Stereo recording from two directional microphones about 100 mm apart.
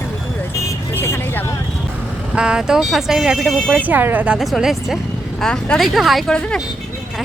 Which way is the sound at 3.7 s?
15° right (ahead or behind).